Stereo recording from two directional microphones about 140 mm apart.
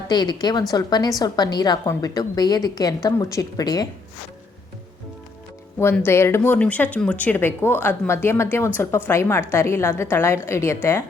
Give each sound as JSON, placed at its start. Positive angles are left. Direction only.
{"t": 0.1, "sound": "a woman's voice", "side_deg": 30}
{"t": 6.1, "sound": "a woman's voice", "side_deg": 20}